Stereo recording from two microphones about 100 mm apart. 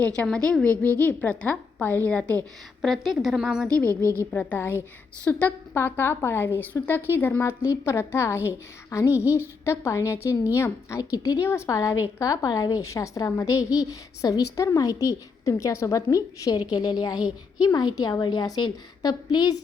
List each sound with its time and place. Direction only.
0.1 s a woman's voice: 10° left (ahead or behind)
2.8 s a woman's voice: centre (ahead or behind)
3.8 s a woman's voice: 30° right (ahead or behind)
4.3 s a woman's voice: 15° left (ahead or behind); by 19.6 s 45° left (ahead or behind)